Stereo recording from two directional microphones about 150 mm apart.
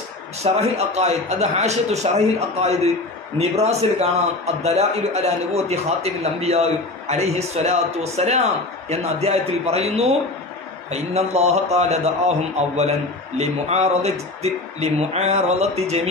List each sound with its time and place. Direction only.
0.4 s a man's voice: 45° right (ahead or behind)